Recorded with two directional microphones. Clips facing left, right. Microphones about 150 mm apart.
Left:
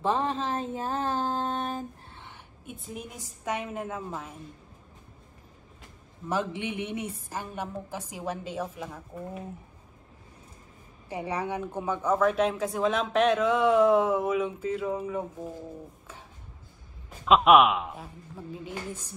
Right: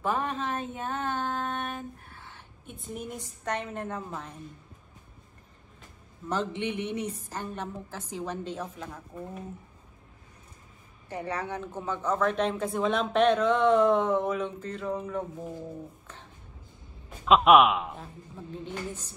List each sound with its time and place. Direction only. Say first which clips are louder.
0.0 s a sound: left 2 dB; 25° left (ahead or behind)
2.6 s speech: right 1 dB; centre (ahead or behind)
6.2 s a woman's voice: even; 10° left (ahead or behind)
11.1 s speech: left 2 dB; 10° left (ahead or behind)
17.2 s speech: even; centre (ahead or behind)